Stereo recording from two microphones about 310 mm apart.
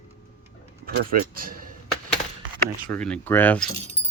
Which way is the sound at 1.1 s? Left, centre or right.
Right.